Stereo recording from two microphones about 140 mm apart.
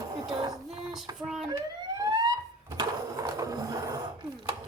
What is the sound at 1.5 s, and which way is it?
Emergency vehicle, 25° right (ahead or behind).